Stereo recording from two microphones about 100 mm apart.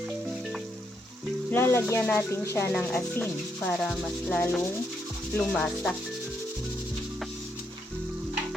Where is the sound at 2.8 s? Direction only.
5° left (ahead or behind).